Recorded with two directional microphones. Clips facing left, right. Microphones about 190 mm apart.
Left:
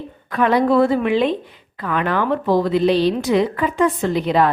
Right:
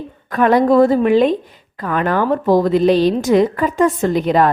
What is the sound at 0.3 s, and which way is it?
A woman's voice, 45° right (ahead or behind).